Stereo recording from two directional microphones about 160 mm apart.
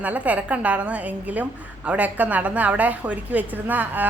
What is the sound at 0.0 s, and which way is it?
A woman's voice, 10° right (ahead or behind).